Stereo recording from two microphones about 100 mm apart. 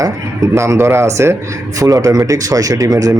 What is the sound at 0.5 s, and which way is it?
A man's voice, 30° right (ahead or behind).